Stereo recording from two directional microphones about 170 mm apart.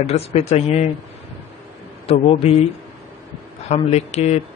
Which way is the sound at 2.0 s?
35° left (ahead or behind).